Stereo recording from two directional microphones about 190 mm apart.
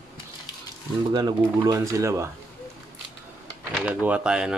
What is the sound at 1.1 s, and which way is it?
Speech, 20° right (ahead or behind).